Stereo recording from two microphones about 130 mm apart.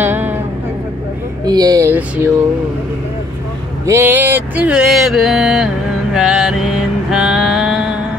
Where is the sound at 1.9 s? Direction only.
15° right (ahead or behind).